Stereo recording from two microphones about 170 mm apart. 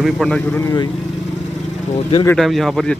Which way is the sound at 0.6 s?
20° left (ahead or behind).